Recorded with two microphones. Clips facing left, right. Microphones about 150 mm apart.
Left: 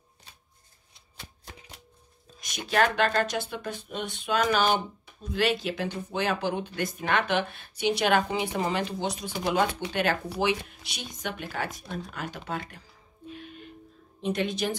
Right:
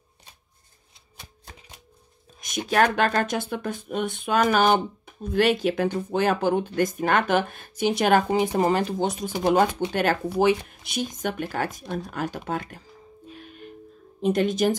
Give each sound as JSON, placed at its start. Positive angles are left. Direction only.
{"t": 2.4, "sound": "speech", "side_deg": -45}
{"t": 13.3, "sound": "music", "side_deg": -45}
{"t": 14.2, "sound": "speech", "side_deg": -45}